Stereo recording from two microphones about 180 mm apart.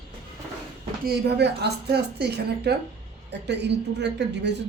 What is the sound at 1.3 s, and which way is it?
Speech, 65° right (ahead or behind).